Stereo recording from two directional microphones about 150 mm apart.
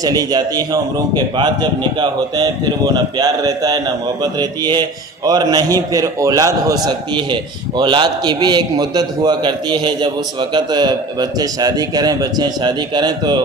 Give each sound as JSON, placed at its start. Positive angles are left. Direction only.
{"t": 0.0, "sound": "a man's voice", "side_deg": -25}
{"t": 2.0, "sound": "a man's voice", "side_deg": -25}